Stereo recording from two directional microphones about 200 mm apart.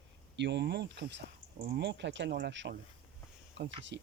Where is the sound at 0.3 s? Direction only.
60° right (ahead or behind).